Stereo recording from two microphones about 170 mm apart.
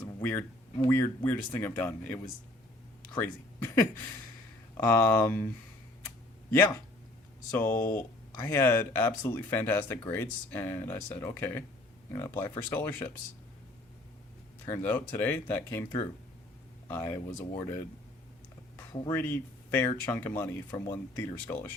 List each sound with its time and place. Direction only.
0.2 s speech: 10° left (ahead or behind)
7.5 s speech: 15° left (ahead or behind)
14.7 s speech: 10° left (ahead or behind)
16.9 s speech: 15° left (ahead or behind)
19.1 s speech: 15° left (ahead or behind)